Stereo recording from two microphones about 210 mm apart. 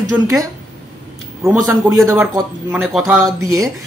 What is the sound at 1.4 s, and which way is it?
Speech, 15° right (ahead or behind).